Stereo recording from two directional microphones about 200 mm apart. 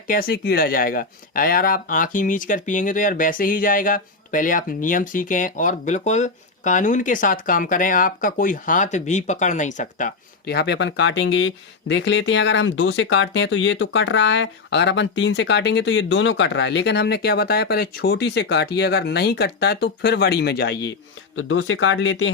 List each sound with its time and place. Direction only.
0.1 s speech: 45° left (ahead or behind)
10.4 s speech: 55° left (ahead or behind)
21.3 s speech: 80° left